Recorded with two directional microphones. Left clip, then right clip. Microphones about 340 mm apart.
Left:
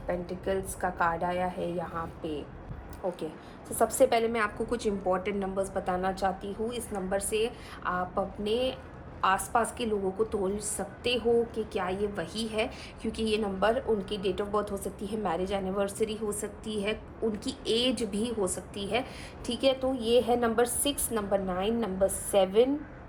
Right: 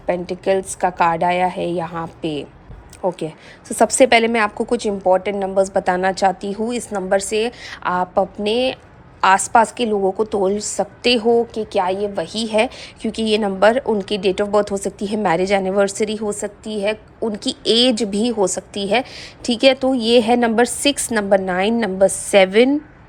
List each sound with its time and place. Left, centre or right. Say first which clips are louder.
0.1 s a woman's voice: right 13 dB; centre
3.8 s a woman's voice: right 12 dB; right